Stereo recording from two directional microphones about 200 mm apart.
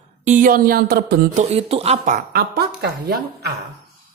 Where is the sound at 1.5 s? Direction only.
30° right (ahead or behind); by 2.6 s 45° right (ahead or behind).